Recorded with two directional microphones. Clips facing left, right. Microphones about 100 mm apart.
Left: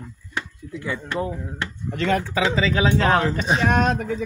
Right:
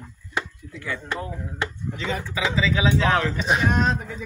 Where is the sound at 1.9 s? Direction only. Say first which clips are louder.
Left 7 dB; 60° left (ahead or behind).